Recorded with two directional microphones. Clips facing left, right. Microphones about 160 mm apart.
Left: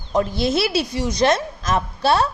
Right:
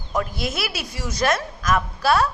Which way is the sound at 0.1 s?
30° left (ahead or behind).